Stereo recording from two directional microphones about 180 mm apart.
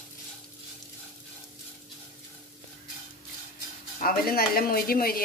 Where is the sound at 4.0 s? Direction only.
55° left (ahead or behind).